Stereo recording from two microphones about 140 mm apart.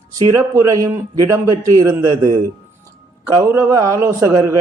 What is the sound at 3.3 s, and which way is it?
Speech, 20° right (ahead or behind).